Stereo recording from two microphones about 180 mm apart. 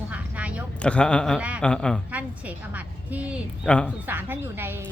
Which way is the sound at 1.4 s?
5° right (ahead or behind).